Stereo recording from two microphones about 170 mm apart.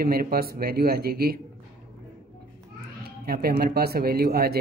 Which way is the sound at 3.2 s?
60° right (ahead or behind).